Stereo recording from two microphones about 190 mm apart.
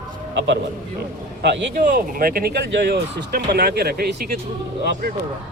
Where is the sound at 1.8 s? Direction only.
45° right (ahead or behind).